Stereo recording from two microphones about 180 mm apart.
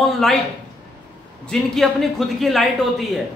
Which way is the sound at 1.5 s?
Centre (ahead or behind).